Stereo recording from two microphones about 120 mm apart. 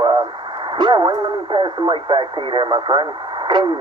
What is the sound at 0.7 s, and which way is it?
Speech, 40° right (ahead or behind).